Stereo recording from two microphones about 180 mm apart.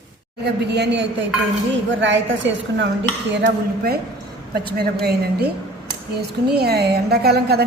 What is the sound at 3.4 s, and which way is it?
A woman's voice, 65° right (ahead or behind).